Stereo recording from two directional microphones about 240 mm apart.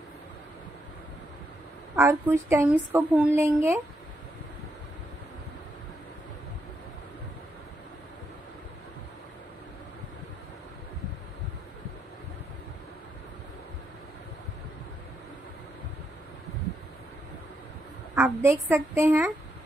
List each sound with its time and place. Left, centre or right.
2.0 s a woman's voice: centre
18.1 s a woman's voice: centre